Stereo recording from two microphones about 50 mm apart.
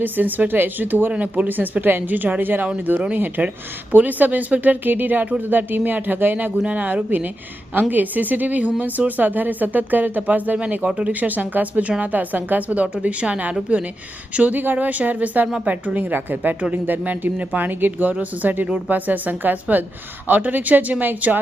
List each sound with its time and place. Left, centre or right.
0.0 s speech: right